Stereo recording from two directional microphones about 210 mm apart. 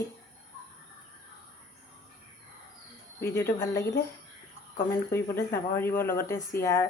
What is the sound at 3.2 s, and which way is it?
Speech, 10° left (ahead or behind).